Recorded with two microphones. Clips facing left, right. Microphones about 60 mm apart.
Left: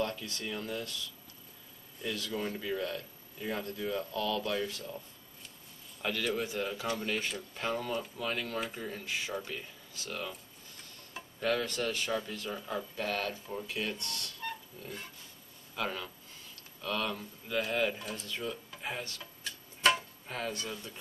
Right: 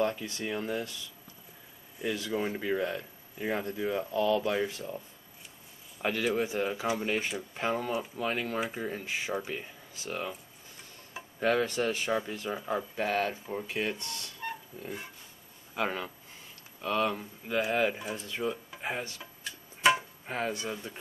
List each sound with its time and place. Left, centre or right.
0.0 s speech: right
2.0 s speech: right
2.5 s speech: right
3.9 s speech: right
6.3 s speech: right
11.3 s speech: right
11.6 s speech: right
13.9 s speech: centre
15.7 s speech: right
17.9 s speech: centre
18.3 s speech: right
19.0 s a sound: centre
20.2 s speech: right